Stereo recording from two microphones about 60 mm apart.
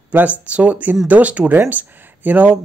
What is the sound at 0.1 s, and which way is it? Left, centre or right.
Speech, right.